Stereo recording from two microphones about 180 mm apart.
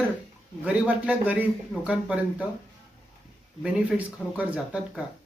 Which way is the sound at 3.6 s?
5° right (ahead or behind).